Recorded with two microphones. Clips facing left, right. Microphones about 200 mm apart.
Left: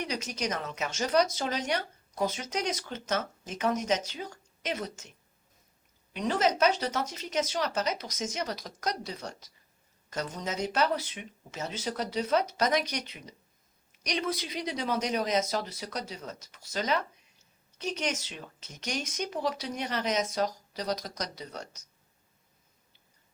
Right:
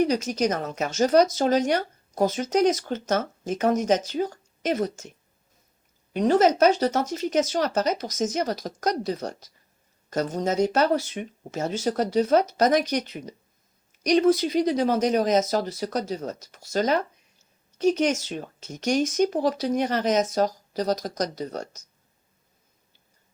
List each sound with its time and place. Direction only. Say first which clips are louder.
0.0 s speech: right 11 dB; 45° right (ahead or behind)
6.1 s speech: right 8 dB; 45° right (ahead or behind)